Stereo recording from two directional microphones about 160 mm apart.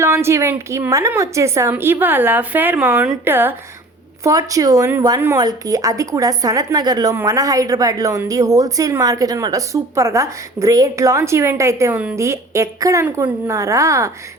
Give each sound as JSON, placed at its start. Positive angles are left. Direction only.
{"t": 0.0, "sound": "a woman's voice", "side_deg": -15}